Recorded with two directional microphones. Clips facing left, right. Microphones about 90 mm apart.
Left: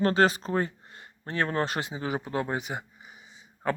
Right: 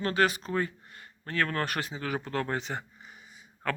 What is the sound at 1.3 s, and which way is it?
Speech, 25° left (ahead or behind).